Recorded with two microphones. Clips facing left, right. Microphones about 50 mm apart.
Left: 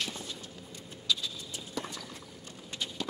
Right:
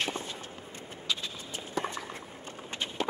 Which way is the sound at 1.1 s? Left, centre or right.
Right.